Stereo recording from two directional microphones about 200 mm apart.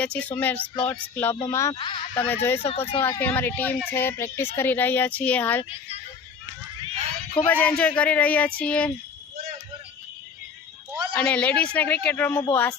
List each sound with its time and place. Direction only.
0.0 s speech: 5° left (ahead or behind); by 2.0 s 25° left (ahead or behind)
2.1 s speech: 10° left (ahead or behind)
2.6 s speech: 30° left (ahead or behind)
3.0 s speech: 10° left (ahead or behind)
7.3 s speech: 10° left (ahead or behind)
11.2 s speech: 5° left (ahead or behind)